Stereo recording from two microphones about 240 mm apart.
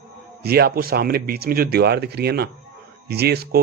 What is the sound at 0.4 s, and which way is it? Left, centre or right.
Speech, right.